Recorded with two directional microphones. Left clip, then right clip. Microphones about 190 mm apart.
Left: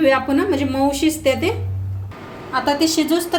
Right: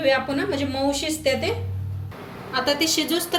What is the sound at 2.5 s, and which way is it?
Speech, 45° left (ahead or behind).